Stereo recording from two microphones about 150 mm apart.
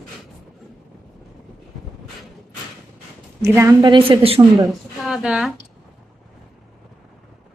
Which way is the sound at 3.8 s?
35° right (ahead or behind).